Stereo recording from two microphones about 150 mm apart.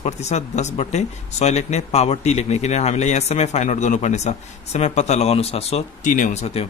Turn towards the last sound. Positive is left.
turn(degrees=45)  # may be behind; listen again after turning